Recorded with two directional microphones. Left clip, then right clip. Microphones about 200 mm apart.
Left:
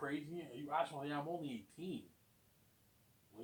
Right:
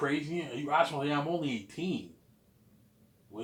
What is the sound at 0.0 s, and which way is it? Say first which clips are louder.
A man's voice: right 12 dB; 20° right (ahead or behind).